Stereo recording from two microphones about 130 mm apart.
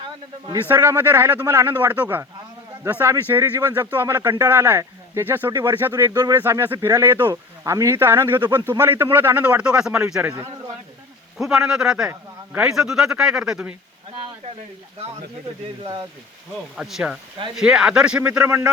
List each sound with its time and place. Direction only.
0.0 s a sound: 35° right (ahead or behind)
0.7 s speech: 15° right (ahead or behind)
6.1 s speech: 30° right (ahead or behind); by 10.3 s 10° right (ahead or behind)
11.3 s speech: 5° right (ahead or behind)
15.8 s speech: 35° right (ahead or behind)
16.7 s speech: 5° right (ahead or behind)